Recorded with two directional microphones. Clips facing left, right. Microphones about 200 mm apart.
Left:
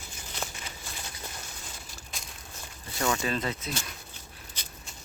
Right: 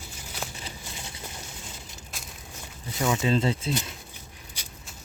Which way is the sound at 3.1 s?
20° right (ahead or behind).